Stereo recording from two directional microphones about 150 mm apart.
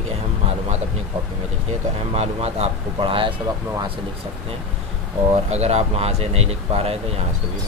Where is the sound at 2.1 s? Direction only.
45° right (ahead or behind).